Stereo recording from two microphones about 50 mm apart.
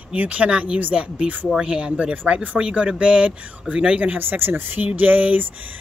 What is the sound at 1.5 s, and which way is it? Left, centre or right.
Speech, centre.